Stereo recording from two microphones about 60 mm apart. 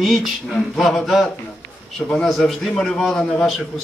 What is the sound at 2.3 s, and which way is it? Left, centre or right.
A man's voice, centre.